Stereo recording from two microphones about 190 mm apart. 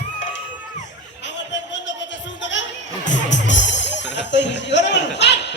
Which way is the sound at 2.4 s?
70° left (ahead or behind).